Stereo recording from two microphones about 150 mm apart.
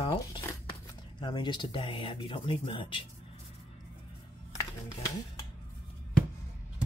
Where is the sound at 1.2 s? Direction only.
30° left (ahead or behind).